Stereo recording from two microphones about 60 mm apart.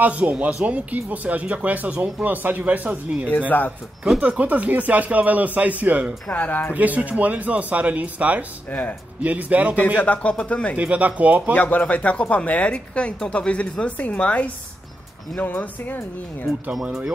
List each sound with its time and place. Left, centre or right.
0.0 s speech: right
3.4 s speech: left
4.2 s speech: right
6.3 s speech: left
6.7 s speech: right
8.6 s speech: left
9.2 s speech: right
9.9 s speech: left
10.8 s speech: right
11.5 s speech: left
16.7 s speech: centre